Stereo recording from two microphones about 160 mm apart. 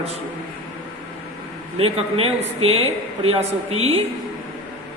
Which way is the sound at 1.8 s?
35° right (ahead or behind).